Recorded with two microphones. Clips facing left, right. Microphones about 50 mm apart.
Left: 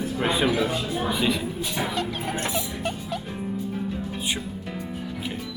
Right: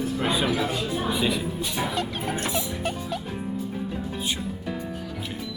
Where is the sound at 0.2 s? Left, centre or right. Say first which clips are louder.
Left 3 dB; centre.